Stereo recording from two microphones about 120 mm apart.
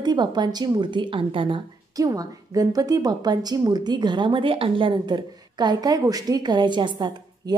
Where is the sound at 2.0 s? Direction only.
30° right (ahead or behind).